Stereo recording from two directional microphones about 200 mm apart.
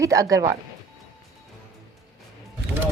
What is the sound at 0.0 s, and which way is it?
Speech, 15° right (ahead or behind).